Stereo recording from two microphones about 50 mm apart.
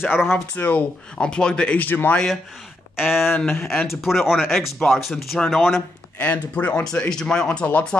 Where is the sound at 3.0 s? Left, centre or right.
Centre.